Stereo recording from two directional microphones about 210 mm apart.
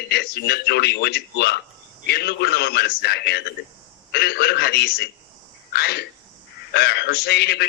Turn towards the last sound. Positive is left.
turn(degrees=50)  # may be behind; listen again after turning